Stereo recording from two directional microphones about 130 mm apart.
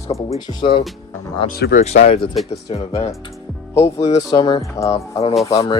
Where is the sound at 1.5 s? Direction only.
75° left (ahead or behind); by 2.2 s 50° left (ahead or behind).